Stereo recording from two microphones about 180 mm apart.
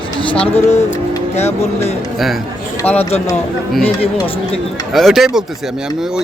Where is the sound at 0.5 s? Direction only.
35° left (ahead or behind).